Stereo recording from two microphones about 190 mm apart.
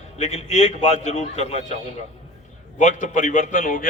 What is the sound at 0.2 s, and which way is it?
A man's voice, 35° left (ahead or behind).